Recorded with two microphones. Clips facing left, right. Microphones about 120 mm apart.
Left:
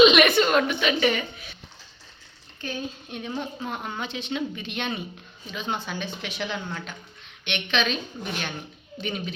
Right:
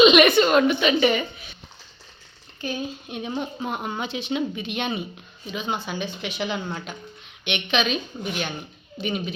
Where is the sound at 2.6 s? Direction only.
10° right (ahead or behind).